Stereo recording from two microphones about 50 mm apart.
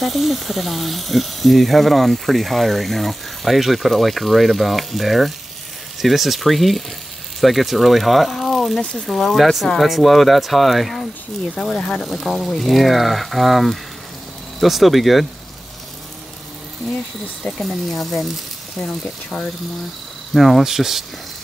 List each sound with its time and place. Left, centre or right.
0.0 s speech: centre
11.7 s speech: centre
12.1 s speech: centre
17.6 s speech: centre
20.3 s speech: centre